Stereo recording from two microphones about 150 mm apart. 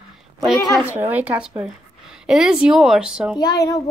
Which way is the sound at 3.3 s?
25° left (ahead or behind).